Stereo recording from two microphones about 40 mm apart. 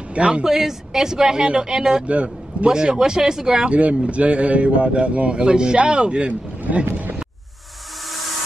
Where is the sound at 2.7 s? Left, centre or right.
Centre.